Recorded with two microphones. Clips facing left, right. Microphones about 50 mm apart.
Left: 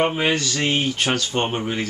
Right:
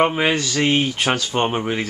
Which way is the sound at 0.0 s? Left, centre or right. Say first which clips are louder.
Right 2 dB; centre.